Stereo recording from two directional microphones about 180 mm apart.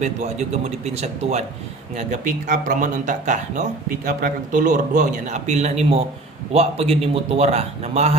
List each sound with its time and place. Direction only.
0.0 s a man's voice: 40° right (ahead or behind)